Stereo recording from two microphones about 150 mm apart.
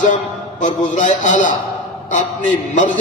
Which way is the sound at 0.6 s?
55° left (ahead or behind).